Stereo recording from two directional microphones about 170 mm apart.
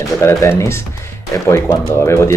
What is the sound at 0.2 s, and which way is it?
Speech, 15° left (ahead or behind).